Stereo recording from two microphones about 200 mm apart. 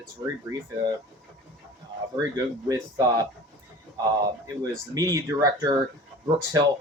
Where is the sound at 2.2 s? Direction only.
20° right (ahead or behind).